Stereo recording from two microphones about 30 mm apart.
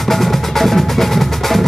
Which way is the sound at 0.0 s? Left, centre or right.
Centre.